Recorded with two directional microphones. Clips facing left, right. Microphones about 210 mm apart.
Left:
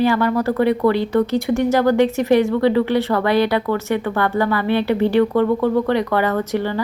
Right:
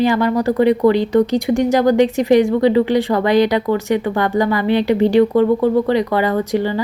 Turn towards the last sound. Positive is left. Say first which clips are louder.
# right 3 dB
turn(degrees=-15)  # may be behind; listen again after turning